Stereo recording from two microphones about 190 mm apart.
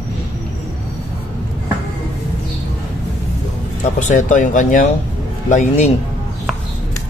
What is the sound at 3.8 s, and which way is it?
Speech, 40° left (ahead or behind).